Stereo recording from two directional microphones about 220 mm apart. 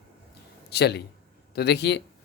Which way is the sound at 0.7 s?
50° left (ahead or behind).